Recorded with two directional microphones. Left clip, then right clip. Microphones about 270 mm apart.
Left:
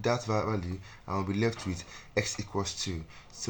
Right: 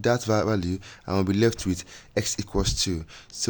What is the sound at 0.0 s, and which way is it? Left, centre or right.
Speech, right.